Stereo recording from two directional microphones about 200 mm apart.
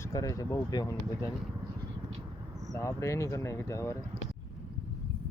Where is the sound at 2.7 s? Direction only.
15° left (ahead or behind).